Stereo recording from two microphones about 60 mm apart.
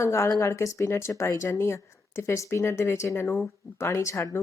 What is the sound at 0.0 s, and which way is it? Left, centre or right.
Speech, left.